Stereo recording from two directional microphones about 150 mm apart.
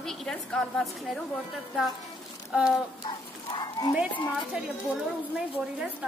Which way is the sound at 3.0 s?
30° left (ahead or behind).